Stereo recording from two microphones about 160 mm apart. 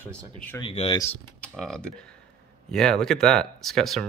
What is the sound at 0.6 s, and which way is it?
Speech, 35° left (ahead or behind).